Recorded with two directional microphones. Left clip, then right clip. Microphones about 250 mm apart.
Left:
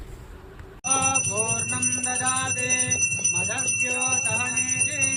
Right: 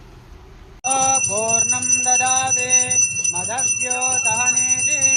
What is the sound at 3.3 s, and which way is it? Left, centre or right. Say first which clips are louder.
Jingle bell: right 3 dB; right.